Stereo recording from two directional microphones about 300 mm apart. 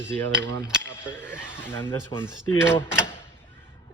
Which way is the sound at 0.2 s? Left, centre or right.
Centre.